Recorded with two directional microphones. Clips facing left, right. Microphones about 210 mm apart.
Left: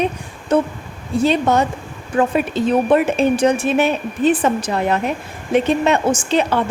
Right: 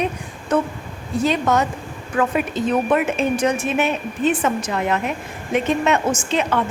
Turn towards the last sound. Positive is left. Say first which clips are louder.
# left 3 dB
turn(degrees=35)  # may be behind; listen again after turning